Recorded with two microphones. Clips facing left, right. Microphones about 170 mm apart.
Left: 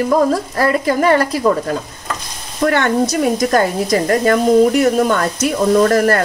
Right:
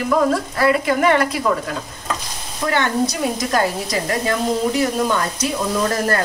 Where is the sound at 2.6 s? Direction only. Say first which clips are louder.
Left 5 dB; 55° left (ahead or behind).